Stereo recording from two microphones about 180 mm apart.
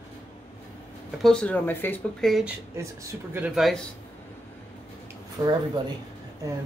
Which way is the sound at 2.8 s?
15° right (ahead or behind).